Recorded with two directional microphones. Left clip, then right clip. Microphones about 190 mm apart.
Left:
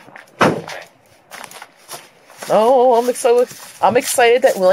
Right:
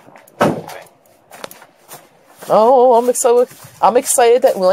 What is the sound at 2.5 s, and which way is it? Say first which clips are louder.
Speech: right 2 dB; 10° right (ahead or behind).